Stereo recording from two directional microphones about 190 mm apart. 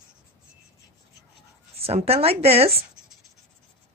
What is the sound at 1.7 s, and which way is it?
Speech, 30° right (ahead or behind).